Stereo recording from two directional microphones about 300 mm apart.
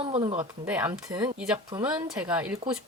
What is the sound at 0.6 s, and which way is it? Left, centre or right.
Speech, centre.